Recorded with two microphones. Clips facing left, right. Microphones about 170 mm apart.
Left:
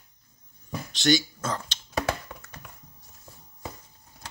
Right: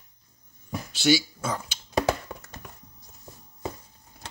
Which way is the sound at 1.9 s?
35° right (ahead or behind).